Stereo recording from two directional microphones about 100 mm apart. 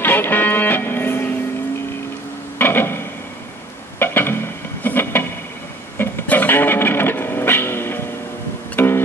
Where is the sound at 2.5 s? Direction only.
20° left (ahead or behind).